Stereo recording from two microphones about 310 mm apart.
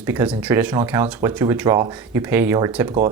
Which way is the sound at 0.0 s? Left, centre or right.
Centre.